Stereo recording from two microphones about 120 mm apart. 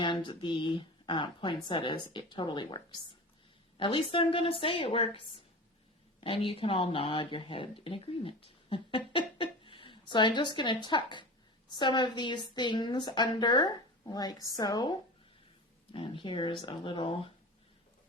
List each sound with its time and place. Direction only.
0.0 s a woman's voice: 45° left (ahead or behind)